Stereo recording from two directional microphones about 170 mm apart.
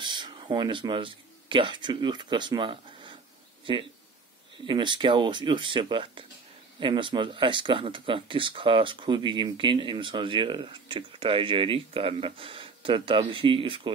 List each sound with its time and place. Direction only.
0.0 s a man's voice: 25° right (ahead or behind)